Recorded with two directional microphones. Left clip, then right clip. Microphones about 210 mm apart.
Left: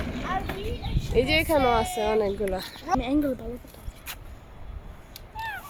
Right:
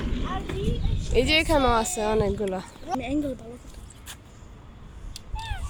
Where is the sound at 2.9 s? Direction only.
45° left (ahead or behind).